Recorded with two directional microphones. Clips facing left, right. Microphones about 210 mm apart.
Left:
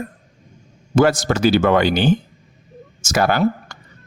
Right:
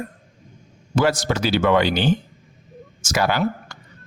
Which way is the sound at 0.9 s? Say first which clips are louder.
Left 4 dB; 50° left (ahead or behind).